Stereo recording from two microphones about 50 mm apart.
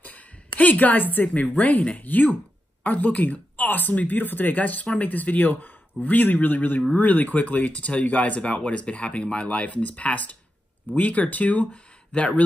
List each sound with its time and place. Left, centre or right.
0.0 s a woman's voice: left
11.7 s speech: left